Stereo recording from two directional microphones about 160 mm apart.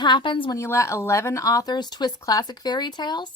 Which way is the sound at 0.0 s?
30° left (ahead or behind).